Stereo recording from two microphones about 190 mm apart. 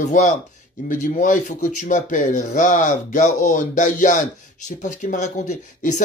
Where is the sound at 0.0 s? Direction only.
40° left (ahead or behind).